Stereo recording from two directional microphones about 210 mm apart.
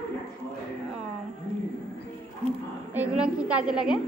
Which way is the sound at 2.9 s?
5° right (ahead or behind).